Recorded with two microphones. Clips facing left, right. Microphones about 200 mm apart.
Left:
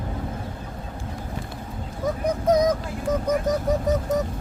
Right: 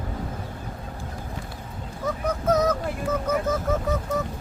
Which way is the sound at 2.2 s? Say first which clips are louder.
Left 2 dB; 15° left (ahead or behind).